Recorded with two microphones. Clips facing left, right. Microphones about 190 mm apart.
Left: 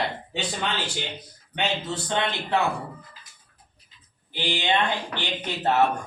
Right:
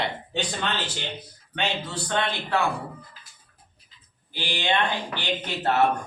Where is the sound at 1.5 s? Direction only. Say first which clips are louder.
Left 1 dB; 20° left (ahead or behind).